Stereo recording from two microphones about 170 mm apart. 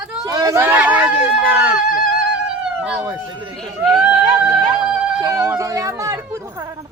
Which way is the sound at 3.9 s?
5° right (ahead or behind).